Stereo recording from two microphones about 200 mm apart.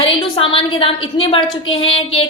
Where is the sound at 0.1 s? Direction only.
25° left (ahead or behind).